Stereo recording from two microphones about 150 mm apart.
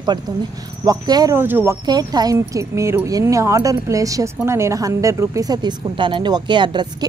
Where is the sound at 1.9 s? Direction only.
25° right (ahead or behind).